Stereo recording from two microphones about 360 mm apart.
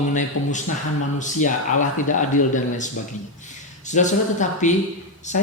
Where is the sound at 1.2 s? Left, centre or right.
Left.